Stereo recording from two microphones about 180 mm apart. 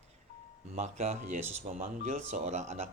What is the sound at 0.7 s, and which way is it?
A man's voice, 40° right (ahead or behind).